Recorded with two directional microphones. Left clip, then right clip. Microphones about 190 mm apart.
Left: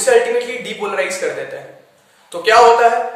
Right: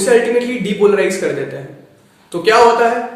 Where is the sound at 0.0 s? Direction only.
5° left (ahead or behind).